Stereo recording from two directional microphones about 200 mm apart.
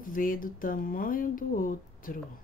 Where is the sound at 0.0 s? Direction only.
45° left (ahead or behind).